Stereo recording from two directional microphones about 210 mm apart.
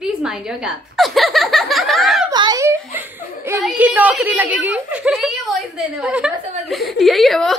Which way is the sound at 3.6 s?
5° right (ahead or behind).